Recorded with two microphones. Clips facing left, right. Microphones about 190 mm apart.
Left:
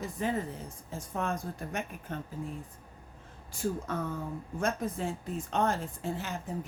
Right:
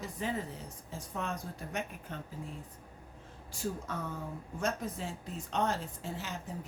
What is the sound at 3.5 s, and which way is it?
A woman's voice, 55° left (ahead or behind).